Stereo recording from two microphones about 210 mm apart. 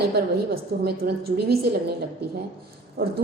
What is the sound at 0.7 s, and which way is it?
Speech, 50° right (ahead or behind).